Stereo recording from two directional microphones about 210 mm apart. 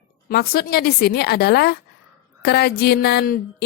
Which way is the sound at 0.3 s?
45° left (ahead or behind).